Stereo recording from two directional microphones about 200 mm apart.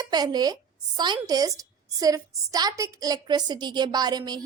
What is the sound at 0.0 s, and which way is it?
A woman's voice, 20° right (ahead or behind).